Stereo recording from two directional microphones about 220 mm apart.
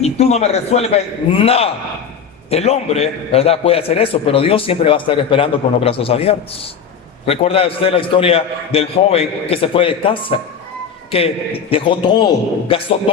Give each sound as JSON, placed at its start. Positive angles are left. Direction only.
{"t": 0.0, "sound": "a man's voice", "side_deg": 30}